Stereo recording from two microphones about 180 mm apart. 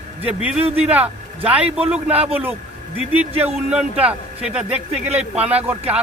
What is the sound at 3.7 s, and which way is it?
A man's voice, 5° right (ahead or behind).